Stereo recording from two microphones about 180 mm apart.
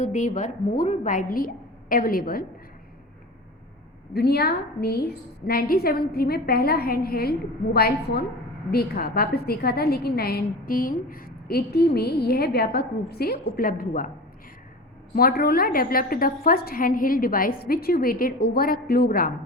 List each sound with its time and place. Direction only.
0.0 s a woman's voice: 45° left (ahead or behind)
4.1 s a woman's voice: 60° left (ahead or behind)
15.1 s a woman's voice: 55° left (ahead or behind)